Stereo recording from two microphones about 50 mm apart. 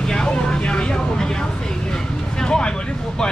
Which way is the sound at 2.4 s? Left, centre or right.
Centre.